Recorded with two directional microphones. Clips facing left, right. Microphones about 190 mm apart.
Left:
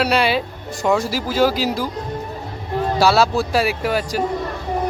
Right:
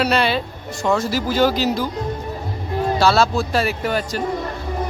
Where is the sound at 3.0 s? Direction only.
10° left (ahead or behind).